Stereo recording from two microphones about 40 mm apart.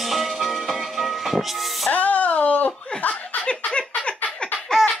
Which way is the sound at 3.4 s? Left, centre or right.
Left.